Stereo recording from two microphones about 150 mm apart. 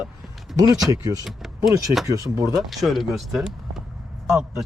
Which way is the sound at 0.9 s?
20° right (ahead or behind).